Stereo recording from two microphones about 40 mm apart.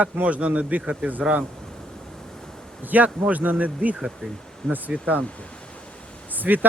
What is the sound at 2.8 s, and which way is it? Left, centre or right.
Speech, right.